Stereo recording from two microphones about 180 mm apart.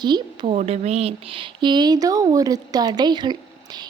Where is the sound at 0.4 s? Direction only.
35° right (ahead or behind).